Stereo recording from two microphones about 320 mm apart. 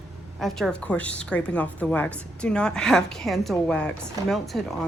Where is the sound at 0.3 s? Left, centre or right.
Centre.